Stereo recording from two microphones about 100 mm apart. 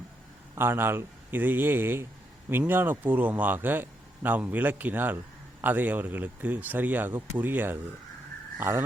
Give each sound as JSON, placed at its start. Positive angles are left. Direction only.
{"t": 0.5, "sound": "speech", "side_deg": -25}